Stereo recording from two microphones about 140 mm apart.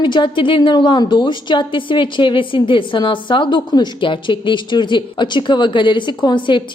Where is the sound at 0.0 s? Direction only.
35° left (ahead or behind).